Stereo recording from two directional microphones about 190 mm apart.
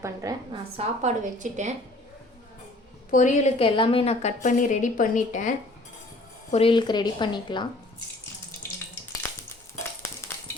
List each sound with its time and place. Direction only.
0.0 s a woman's voice: 20° right (ahead or behind)
0.8 s a woman's voice: 40° right (ahead or behind)
3.1 s a woman's voice: 40° left (ahead or behind)
6.5 s a woman's voice: 30° left (ahead or behind)
9.7 s a sound: 15° left (ahead or behind)